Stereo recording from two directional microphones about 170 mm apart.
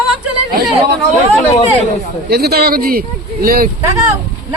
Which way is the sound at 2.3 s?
70° right (ahead or behind).